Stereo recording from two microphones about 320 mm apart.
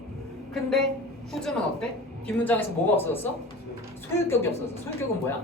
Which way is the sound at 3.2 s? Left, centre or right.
Centre.